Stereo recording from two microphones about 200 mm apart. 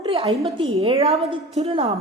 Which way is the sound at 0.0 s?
25° right (ahead or behind).